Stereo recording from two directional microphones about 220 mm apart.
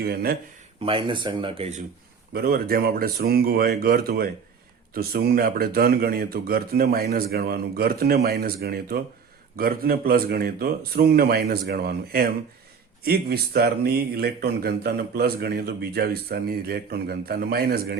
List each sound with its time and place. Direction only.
0.0 s speech: 45° right (ahead or behind)
0.8 s speech: 25° right (ahead or behind)
2.3 s speech: 45° right (ahead or behind)